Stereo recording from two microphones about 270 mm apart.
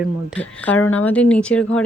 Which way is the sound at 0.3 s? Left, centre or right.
Centre.